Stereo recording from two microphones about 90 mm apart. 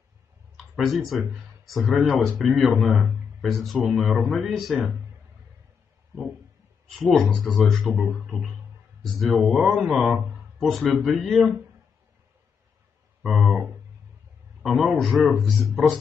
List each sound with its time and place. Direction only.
0.7 s speech: centre (ahead or behind)
7.0 s speech: centre (ahead or behind)
13.2 s a sound: 5° right (ahead or behind)
14.6 s speech: centre (ahead or behind)